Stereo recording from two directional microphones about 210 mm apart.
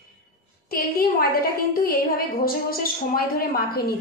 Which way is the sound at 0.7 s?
45° left (ahead or behind).